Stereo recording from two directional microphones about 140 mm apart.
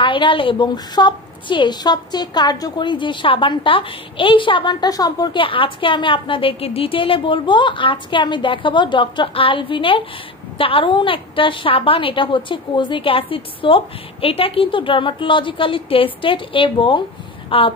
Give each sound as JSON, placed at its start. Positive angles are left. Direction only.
{"t": 0.0, "sound": "a woman's voice", "side_deg": 35}